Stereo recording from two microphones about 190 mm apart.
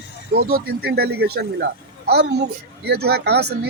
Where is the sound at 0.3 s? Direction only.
55° right (ahead or behind).